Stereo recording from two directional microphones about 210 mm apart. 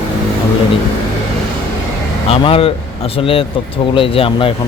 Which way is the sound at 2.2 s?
25° left (ahead or behind).